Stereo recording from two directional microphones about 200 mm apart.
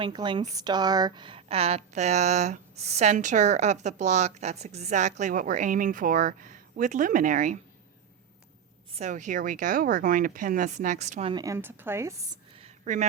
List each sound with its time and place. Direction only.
0.0 s speech: 25° right (ahead or behind); by 7.6 s 40° right (ahead or behind)
9.0 s speech: 40° right (ahead or behind); by 12.4 s 15° right (ahead or behind)
12.5 s a sound: 35° right (ahead or behind)